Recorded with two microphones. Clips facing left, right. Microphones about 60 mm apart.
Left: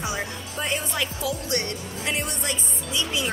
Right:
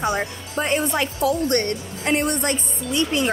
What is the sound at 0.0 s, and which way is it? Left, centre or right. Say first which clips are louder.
A woman's voice: right 6 dB; right.